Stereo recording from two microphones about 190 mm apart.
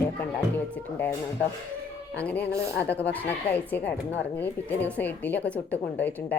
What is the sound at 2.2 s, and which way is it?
A woman's voice, 5° left (ahead or behind).